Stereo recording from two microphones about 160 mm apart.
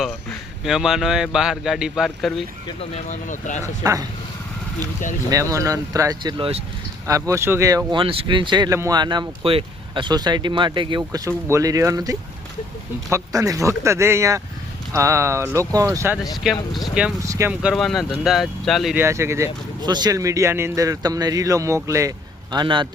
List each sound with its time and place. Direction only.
0.6 s speech: centre (ahead or behind)
3.1 s speech: 50° left (ahead or behind)
3.6 s speech: 20° right (ahead or behind)
5.3 s speech: 20° right (ahead or behind)
7.1 s speech: 20° right (ahead or behind)
11.3 s speech: 15° right (ahead or behind)
16.7 s speech: 5° right (ahead or behind)
17.2 s speech: 20° right (ahead or behind)
17.5 s speech: 5° right (ahead or behind)
18.9 s speech: 15° right (ahead or behind)
22.5 s speech: 30° right (ahead or behind)